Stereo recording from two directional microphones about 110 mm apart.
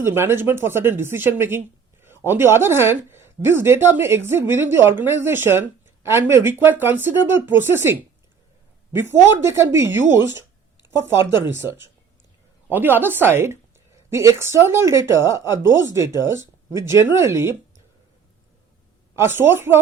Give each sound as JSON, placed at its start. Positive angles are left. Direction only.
{"t": 0.0, "sound": "speech", "side_deg": -20}
{"t": 19.1, "sound": "speech", "side_deg": -20}